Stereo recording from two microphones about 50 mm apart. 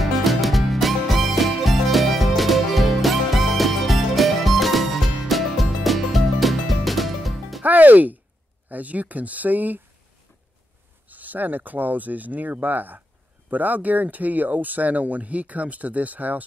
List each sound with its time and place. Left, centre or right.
0.0 s music: centre
7.6 s music: right
8.6 s speech: right
11.1 s speech: right